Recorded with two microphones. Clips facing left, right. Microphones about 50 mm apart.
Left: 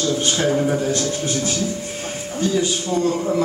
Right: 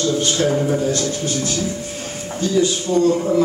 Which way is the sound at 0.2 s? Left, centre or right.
Centre.